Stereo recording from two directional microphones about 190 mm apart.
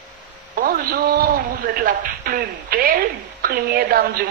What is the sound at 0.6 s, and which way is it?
A man's voice, 50° right (ahead or behind).